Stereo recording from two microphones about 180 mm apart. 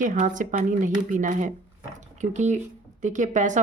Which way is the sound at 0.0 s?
45° right (ahead or behind).